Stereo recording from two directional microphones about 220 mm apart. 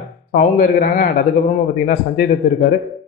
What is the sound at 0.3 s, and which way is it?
A man's voice, 40° left (ahead or behind).